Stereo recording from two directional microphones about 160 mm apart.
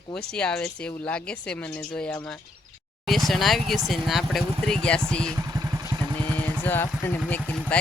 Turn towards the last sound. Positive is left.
turn(degrees=10)  # may be behind; listen again after turning